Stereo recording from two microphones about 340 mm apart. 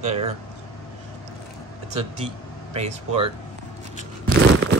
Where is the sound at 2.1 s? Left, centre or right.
Centre.